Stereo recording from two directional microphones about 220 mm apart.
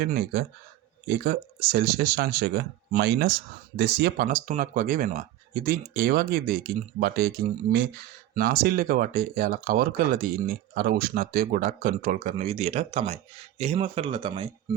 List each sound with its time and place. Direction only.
0.0 s speech: 45° right (ahead or behind); by 14.8 s 25° right (ahead or behind)